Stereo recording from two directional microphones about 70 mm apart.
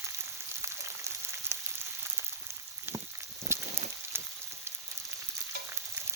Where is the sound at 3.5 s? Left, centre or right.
Right.